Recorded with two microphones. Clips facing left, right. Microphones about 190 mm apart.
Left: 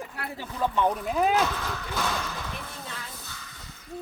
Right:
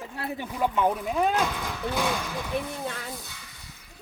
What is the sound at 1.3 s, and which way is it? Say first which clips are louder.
Speech: left 1 dB; 15° right (ahead or behind).